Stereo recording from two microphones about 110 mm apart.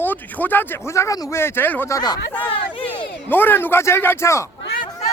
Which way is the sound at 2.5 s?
55° left (ahead or behind).